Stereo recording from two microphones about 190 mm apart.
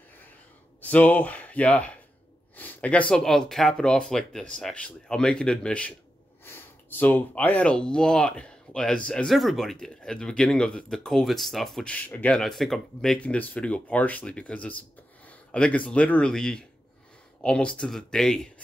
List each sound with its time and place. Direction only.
0.7 s speech: 10° left (ahead or behind)